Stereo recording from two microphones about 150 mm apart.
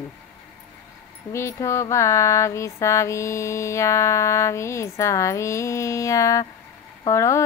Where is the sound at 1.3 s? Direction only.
20° left (ahead or behind).